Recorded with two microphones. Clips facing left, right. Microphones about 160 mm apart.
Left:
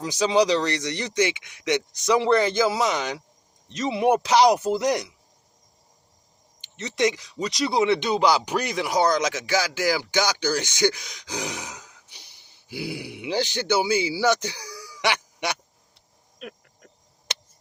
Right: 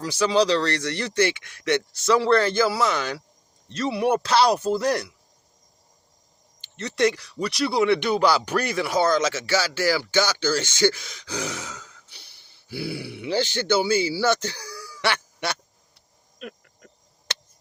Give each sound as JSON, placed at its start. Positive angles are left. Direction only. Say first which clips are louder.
{"t": 0.0, "sound": "speech", "louder": "even", "side_deg": 20}
{"t": 6.9, "sound": "speech", "louder": "right 1 dB", "side_deg": 15}
{"t": 16.4, "sound": "a sound", "louder": "right 1 dB", "side_deg": 0}